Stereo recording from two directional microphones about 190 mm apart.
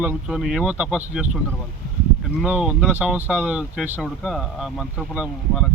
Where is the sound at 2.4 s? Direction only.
5° right (ahead or behind).